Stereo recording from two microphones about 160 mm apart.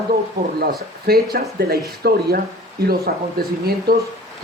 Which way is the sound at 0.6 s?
70° right (ahead or behind).